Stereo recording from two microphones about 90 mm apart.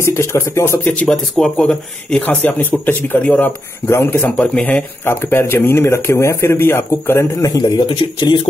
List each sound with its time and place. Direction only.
0.0 s speech: 30° left (ahead or behind)
1.0 s speech: 5° left (ahead or behind)
5.0 s speech: 25° left (ahead or behind)
7.4 s speech: 50° left (ahead or behind)